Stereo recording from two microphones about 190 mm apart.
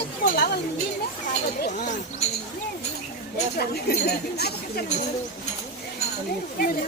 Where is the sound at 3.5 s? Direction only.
55° left (ahead or behind).